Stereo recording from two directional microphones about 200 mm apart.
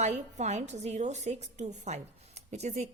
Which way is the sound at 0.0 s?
35° right (ahead or behind).